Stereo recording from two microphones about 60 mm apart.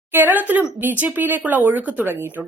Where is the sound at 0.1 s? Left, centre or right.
Right.